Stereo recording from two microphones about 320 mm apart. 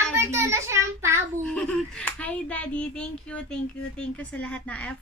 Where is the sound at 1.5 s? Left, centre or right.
Centre.